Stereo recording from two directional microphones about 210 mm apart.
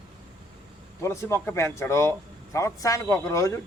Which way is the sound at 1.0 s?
15° left (ahead or behind).